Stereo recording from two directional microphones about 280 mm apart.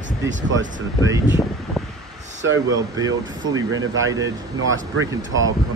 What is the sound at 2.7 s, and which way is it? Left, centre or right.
Speech, centre.